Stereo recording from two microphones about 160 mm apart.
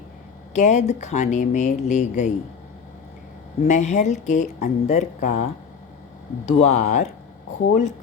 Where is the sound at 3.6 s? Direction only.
45° left (ahead or behind).